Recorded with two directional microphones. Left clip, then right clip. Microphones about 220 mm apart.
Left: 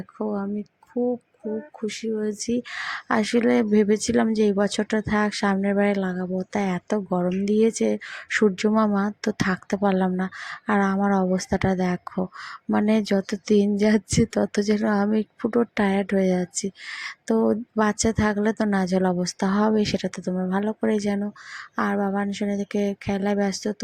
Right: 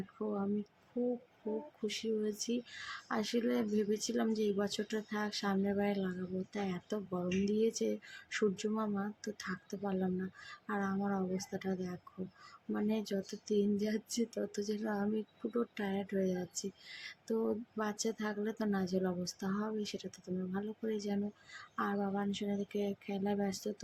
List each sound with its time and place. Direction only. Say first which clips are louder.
0.3 s speech: left 9 dB; 25° left (ahead or behind)
1.4 s speech: left 9 dB; 55° left (ahead or behind)
1.9 s speech: left 9 dB; 25° left (ahead or behind)